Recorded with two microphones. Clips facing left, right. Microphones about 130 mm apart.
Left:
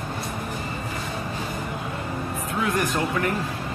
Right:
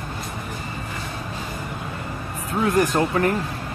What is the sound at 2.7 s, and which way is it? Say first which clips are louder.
Speech: right 7 dB; 35° right (ahead or behind).